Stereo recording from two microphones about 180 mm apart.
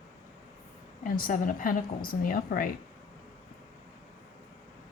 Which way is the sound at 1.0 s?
50° left (ahead or behind).